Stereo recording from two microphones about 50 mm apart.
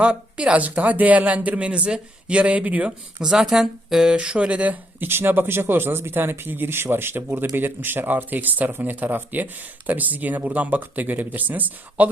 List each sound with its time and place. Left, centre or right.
0.0 s speech: right
3.2 s speech: centre
4.1 s speech: right
5.0 s speech: right